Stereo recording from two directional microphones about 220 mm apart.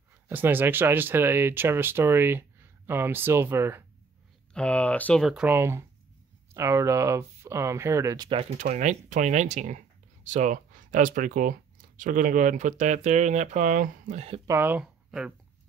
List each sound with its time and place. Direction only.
0.3 s speech: 10° right (ahead or behind)
4.6 s speech: 5° left (ahead or behind); by 14.4 s 30° right (ahead or behind)
14.5 s speech: 10° right (ahead or behind)